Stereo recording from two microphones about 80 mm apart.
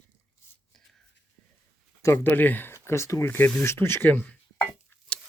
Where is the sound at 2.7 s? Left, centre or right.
Left.